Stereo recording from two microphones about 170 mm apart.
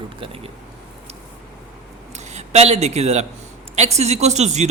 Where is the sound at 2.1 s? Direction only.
40° right (ahead or behind).